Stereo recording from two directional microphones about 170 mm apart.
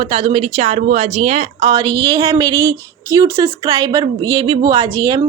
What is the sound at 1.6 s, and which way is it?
Speech, 25° right (ahead or behind).